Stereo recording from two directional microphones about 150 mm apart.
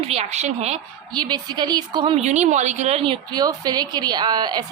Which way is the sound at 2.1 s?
50° right (ahead or behind).